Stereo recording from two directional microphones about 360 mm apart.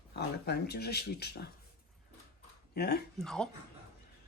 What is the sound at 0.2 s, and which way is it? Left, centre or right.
Speech, left.